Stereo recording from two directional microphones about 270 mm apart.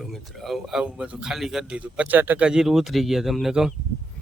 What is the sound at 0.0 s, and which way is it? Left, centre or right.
Speech, centre.